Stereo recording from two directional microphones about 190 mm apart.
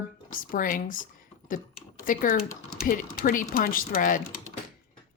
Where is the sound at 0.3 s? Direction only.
45° left (ahead or behind).